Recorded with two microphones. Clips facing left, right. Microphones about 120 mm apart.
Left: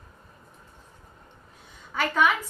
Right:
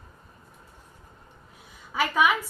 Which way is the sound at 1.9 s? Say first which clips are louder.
Even; 5° right (ahead or behind).